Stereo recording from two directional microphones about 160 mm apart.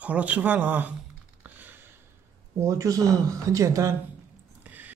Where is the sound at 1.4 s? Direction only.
10° right (ahead or behind).